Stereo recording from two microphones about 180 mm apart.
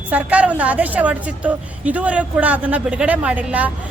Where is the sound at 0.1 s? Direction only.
10° right (ahead or behind).